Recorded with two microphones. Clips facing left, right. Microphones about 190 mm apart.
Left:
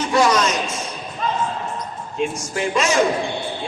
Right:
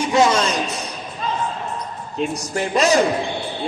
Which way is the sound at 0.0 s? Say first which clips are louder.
Right 1 dB; 20° right (ahead or behind).